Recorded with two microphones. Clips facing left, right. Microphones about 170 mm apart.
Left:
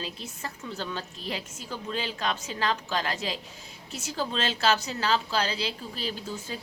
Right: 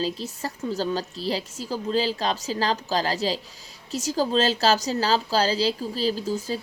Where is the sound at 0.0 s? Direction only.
35° right (ahead or behind).